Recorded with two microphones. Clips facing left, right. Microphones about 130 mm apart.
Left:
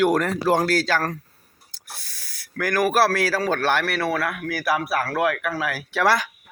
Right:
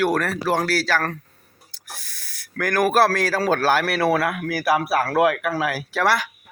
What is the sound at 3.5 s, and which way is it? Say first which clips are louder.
Speech: right 5 dB; 40° right (ahead or behind).